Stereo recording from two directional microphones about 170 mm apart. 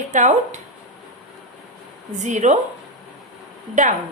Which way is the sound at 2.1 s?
45° right (ahead or behind).